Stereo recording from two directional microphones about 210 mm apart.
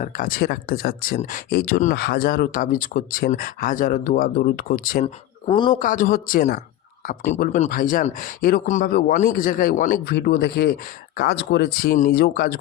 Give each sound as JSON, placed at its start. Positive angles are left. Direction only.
{"t": 0.0, "sound": "speech", "side_deg": 45}
{"t": 5.5, "sound": "a man's voice", "side_deg": 25}
{"t": 5.7, "sound": "speech", "side_deg": 40}